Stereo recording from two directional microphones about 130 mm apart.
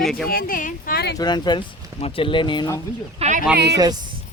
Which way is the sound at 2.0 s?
45° left (ahead or behind).